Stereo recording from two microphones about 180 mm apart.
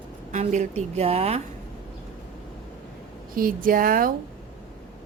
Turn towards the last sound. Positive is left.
turn(degrees=-50)  # may be behind; listen again after turning